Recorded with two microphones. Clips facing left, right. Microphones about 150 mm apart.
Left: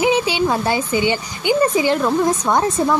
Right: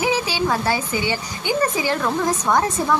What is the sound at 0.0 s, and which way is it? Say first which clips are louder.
A woman's voice: left 4 dB; 20° left (ahead or behind).